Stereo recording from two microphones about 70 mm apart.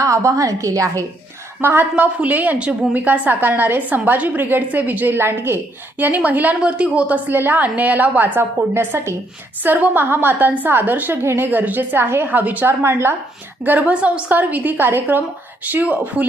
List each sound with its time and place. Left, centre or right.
0.0 s a woman's voice: right
1.6 s a woman's voice: right
11.2 s speech: right
11.4 s a woman's voice: right
12.8 s speech: right
13.7 s a woman's voice: right